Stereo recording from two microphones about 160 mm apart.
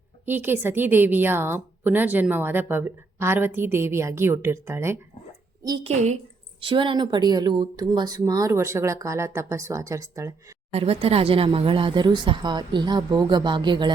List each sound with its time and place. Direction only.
0.3 s a woman's voice: 15° right (ahead or behind)
5.8 s a woman's voice: 45° right (ahead or behind)
6.6 s speech: 35° right (ahead or behind)
10.7 s speech: 40° right (ahead or behind)